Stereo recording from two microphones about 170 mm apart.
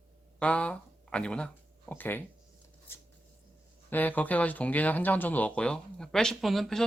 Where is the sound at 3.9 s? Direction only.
10° left (ahead or behind).